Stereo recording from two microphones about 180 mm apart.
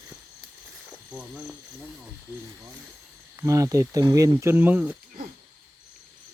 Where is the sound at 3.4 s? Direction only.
15° right (ahead or behind).